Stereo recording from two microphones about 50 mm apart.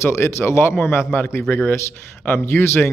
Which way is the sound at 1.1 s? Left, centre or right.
Left.